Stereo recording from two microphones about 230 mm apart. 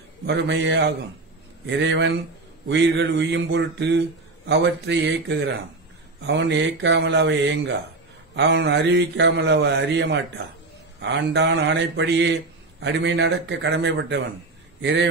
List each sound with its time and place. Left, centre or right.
0.3 s a man's voice: right